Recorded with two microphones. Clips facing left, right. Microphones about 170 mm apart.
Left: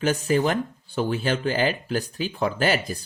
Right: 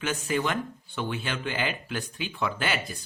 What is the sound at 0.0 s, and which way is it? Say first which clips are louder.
Speech: left 7 dB; 35° left (ahead or behind).